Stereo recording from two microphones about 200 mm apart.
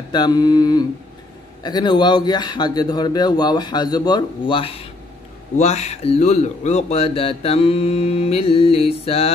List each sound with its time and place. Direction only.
0.1 s a man's voice: 20° left (ahead or behind)